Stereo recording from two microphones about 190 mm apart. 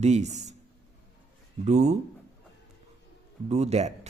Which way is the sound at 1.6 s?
35° right (ahead or behind).